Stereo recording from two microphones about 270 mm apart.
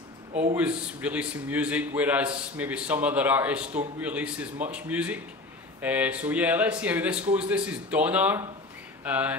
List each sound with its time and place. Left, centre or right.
0.3 s speech: right
0.6 s a man's voice: centre